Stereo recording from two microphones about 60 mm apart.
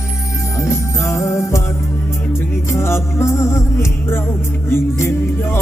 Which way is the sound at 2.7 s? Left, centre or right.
Left.